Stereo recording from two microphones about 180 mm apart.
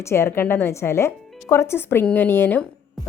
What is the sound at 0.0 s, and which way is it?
A woman's voice, 15° left (ahead or behind).